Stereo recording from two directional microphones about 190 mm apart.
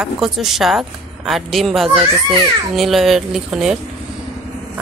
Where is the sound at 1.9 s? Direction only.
30° right (ahead or behind).